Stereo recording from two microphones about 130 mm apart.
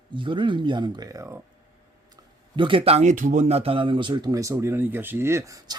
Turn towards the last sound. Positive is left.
turn(degrees=-25)  # may be behind; listen again after turning